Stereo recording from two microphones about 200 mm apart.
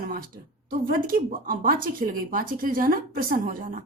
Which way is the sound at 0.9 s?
45° right (ahead or behind).